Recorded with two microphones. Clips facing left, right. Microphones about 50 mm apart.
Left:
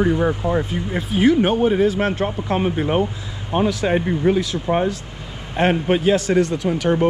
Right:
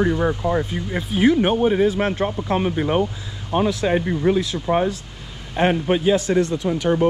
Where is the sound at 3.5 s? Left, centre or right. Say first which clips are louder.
Left 1 dB; left.